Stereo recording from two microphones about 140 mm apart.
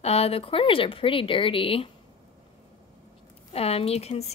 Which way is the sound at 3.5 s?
45° left (ahead or behind).